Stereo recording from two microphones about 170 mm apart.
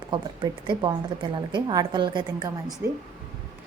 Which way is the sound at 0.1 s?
25° right (ahead or behind).